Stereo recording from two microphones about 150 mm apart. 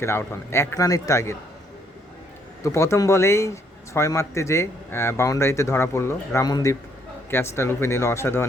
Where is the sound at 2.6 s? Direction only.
20° left (ahead or behind).